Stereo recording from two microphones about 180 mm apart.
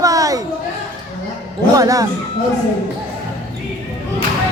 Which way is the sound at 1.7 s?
20° right (ahead or behind).